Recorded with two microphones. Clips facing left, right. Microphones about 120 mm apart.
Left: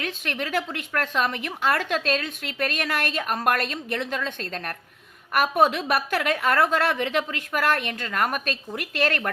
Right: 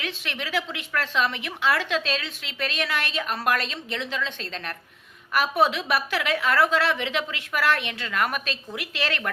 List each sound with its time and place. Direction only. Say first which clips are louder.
0.0 s a woman's voice: left 3 dB; 45° left (ahead or behind)